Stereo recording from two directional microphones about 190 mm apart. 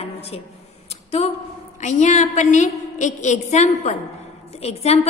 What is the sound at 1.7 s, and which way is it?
A woman's voice, 40° left (ahead or behind).